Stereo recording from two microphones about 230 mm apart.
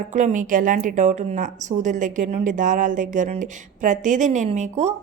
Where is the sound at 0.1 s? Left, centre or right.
Right.